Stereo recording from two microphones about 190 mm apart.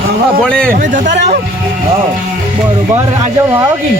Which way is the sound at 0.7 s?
45° right (ahead or behind).